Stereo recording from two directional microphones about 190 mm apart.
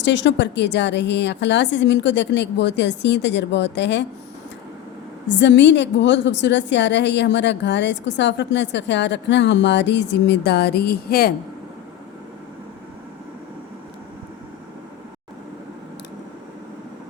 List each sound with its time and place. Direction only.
0.0 s a woman's voice: 70° left (ahead or behind)
5.3 s a woman's voice: 70° left (ahead or behind); by 11.3 s 55° left (ahead or behind)